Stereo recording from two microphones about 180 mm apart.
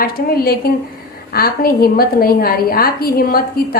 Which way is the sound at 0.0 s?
55° left (ahead or behind).